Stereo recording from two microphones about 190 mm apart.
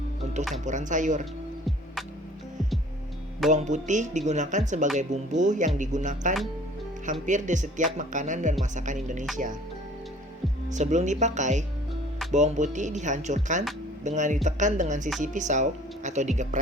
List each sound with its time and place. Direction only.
0.6 s speech: 40° right (ahead or behind)
3.5 s speech: 40° right (ahead or behind)
10.7 s speech: 40° right (ahead or behind)